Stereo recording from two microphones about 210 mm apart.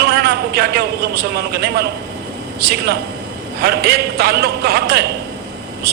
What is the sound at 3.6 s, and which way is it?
A man's voice, 50° right (ahead or behind).